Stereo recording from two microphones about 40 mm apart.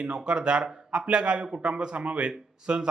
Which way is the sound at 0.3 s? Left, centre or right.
Right.